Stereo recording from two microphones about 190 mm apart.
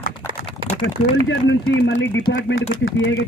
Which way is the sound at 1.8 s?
70° left (ahead or behind).